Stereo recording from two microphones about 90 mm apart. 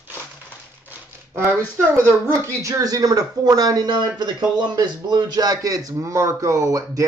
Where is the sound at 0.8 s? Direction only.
25° right (ahead or behind).